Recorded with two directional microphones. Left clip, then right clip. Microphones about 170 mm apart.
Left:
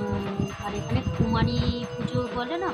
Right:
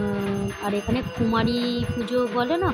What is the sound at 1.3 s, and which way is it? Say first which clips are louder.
Speech: right 5 dB; 25° right (ahead or behind).